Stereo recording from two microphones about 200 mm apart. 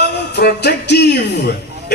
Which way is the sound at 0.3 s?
55° left (ahead or behind).